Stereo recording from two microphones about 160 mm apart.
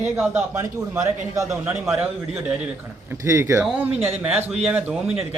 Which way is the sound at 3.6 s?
5° right (ahead or behind).